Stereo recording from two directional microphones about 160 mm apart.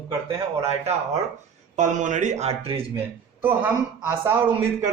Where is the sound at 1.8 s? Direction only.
50° right (ahead or behind).